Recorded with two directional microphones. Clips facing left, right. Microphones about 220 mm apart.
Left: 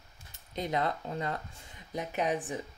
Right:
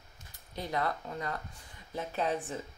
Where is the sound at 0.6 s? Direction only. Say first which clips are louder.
Left 2 dB; 20° left (ahead or behind).